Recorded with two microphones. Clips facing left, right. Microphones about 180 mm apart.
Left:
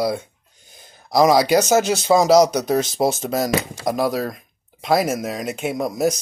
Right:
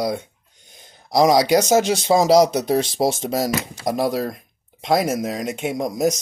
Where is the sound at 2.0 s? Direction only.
25° right (ahead or behind).